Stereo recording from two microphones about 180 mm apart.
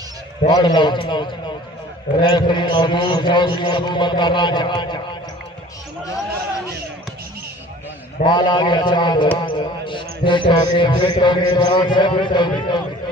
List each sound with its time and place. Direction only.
0.5 s a man's voice: 25° left (ahead or behind)
8.3 s a man's voice: 25° left (ahead or behind)